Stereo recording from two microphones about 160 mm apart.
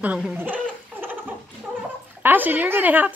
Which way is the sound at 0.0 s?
10° right (ahead or behind).